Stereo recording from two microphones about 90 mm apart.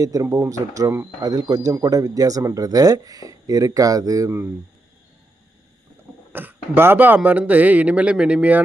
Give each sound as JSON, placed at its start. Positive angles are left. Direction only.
{"t": 0.0, "sound": "speech", "side_deg": -40}
{"t": 4.3, "sound": "speech", "side_deg": -25}
{"t": 6.3, "sound": "speech", "side_deg": -20}